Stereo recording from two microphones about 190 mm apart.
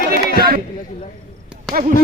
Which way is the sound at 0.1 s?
55° right (ahead or behind).